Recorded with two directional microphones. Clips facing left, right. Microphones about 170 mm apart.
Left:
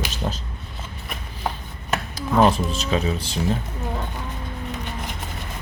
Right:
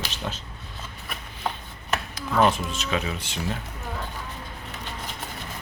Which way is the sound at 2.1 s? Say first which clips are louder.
Left 4 dB; 35° left (ahead or behind).